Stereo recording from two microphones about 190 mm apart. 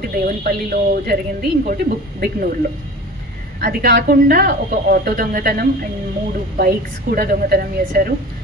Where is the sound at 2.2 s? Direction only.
50° right (ahead or behind).